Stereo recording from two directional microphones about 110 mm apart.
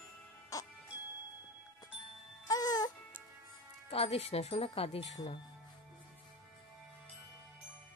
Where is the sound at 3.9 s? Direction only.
65° left (ahead or behind).